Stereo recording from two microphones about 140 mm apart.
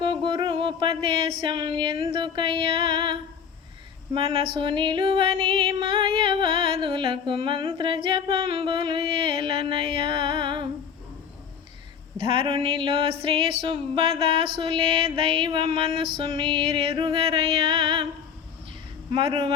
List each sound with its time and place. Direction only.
0.0 s music: 35° right (ahead or behind)
12.1 s music: 40° right (ahead or behind)
19.1 s music: 40° right (ahead or behind)